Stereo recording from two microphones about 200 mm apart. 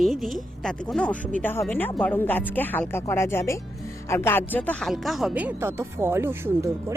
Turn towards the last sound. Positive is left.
turn(degrees=-15)  # may be behind; listen again after turning